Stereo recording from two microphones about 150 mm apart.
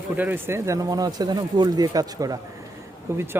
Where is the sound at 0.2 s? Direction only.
15° right (ahead or behind).